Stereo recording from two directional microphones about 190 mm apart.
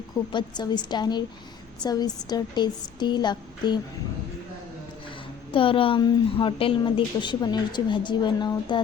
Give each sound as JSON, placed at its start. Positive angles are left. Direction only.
{"t": 0.3, "sound": "a woman's voice", "side_deg": 25}
{"t": 5.5, "sound": "a woman's voice", "side_deg": 30}